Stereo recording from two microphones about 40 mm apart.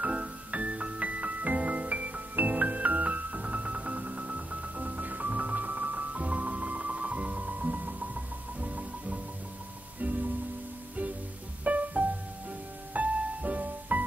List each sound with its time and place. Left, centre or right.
0.0 s music: right
11.6 s music: right